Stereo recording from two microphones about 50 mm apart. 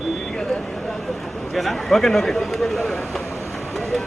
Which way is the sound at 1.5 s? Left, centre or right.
Centre.